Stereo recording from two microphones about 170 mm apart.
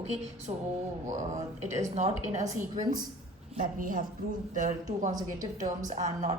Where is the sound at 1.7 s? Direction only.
40° right (ahead or behind).